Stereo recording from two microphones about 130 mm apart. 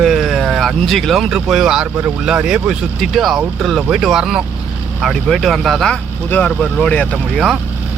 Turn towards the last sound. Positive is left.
turn(degrees=10)  # may be behind; listen again after turning